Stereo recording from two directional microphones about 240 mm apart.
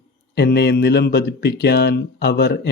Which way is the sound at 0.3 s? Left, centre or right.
Left.